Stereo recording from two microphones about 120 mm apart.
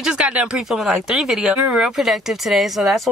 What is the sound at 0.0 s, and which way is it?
Speech, 5° right (ahead or behind).